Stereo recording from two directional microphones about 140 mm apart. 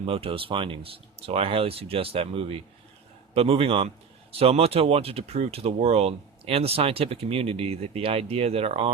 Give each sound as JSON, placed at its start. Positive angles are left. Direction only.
{"t": 0.0, "sound": "a man's voice", "side_deg": -40}